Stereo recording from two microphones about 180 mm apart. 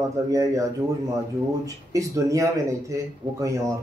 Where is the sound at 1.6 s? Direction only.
20° right (ahead or behind).